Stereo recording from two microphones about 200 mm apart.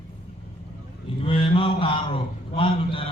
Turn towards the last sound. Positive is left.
turn(degrees=25)  # may be behind; listen again after turning